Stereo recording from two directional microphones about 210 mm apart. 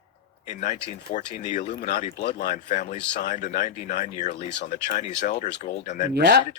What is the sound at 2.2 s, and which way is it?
Speech, 50° left (ahead or behind).